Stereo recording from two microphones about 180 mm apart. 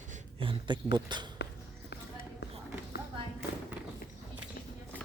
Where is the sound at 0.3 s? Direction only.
30° right (ahead or behind).